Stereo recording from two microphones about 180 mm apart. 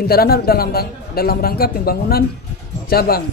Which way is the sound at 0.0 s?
60° left (ahead or behind).